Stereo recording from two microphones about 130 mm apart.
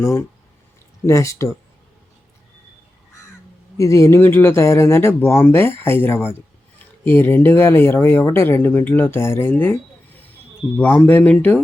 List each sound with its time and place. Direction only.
0.0 s speech: 20° left (ahead or behind)
3.8 s speech: 25° left (ahead or behind)
10.8 s speech: 15° left (ahead or behind)